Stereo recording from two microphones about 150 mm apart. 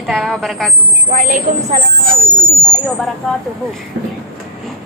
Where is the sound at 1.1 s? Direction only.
55° right (ahead or behind).